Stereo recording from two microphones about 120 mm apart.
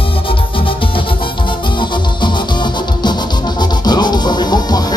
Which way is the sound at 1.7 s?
40° left (ahead or behind).